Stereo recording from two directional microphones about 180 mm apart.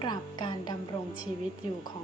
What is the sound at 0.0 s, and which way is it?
Speech, 25° left (ahead or behind).